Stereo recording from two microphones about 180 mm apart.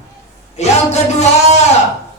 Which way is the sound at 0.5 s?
35° left (ahead or behind).